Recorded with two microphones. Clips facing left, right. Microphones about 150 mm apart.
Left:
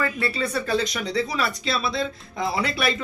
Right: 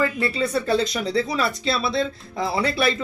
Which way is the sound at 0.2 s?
25° right (ahead or behind).